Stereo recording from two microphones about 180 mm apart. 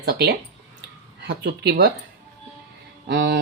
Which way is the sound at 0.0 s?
60° right (ahead or behind).